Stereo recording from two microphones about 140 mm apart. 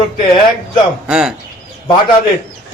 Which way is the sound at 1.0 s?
5° right (ahead or behind).